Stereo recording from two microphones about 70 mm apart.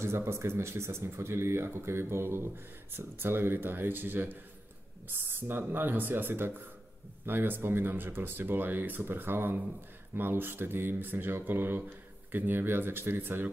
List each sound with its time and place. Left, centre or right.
0.0 s speech: right